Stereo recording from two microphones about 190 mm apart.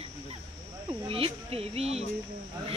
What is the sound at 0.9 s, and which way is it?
Speech, 30° right (ahead or behind).